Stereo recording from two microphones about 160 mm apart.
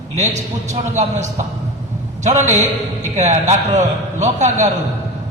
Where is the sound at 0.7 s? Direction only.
50° right (ahead or behind).